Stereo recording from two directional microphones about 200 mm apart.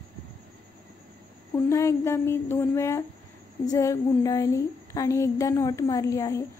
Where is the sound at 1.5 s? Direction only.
15° left (ahead or behind).